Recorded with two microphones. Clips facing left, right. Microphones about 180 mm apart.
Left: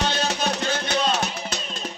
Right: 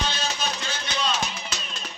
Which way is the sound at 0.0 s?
65° left (ahead or behind).